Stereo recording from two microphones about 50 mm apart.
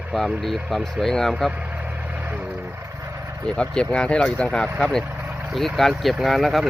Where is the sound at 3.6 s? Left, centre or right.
Centre.